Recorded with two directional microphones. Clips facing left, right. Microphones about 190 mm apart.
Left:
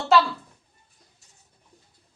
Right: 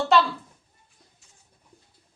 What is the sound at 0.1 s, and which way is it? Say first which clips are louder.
Speech: left 1 dB; centre (ahead or behind).